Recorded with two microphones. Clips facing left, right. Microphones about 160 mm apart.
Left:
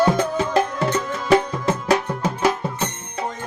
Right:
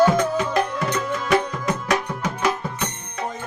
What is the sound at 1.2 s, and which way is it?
Music, 30° left (ahead or behind).